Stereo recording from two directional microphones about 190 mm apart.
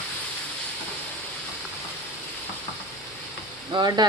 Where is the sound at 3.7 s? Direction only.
20° right (ahead or behind).